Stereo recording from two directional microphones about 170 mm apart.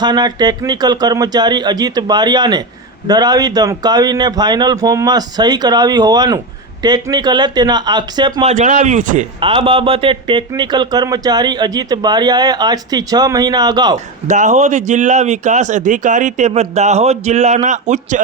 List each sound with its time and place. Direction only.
0.0 s speech: 25° right (ahead or behind)
8.4 s speech: 45° right (ahead or behind)
9.4 s speech: 30° right (ahead or behind)
14.3 s speech: 45° right (ahead or behind)